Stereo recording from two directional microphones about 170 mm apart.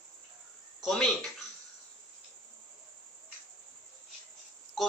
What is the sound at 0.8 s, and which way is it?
Speech, 5° left (ahead or behind).